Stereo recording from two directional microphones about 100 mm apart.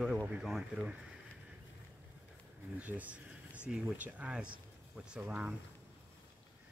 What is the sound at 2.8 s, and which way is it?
Speech, 15° right (ahead or behind).